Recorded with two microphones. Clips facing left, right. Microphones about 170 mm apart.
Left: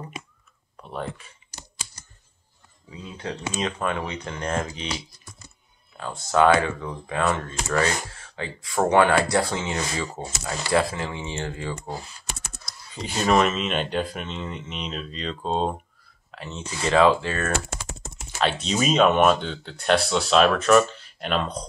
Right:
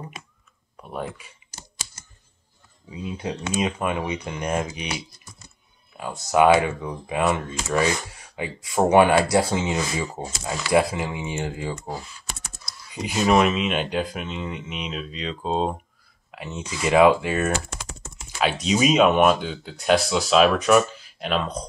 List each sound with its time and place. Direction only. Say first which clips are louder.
0.7 s speech: right 1 dB; 10° right (ahead or behind)
2.9 s speech: right 4 dB; 15° right (ahead or behind)
5.9 s speech: right 1 dB; 15° right (ahead or behind)
12.9 s speech: right 2 dB; 10° right (ahead or behind)